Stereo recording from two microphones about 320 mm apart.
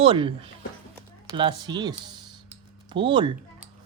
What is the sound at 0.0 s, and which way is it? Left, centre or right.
Speech, centre.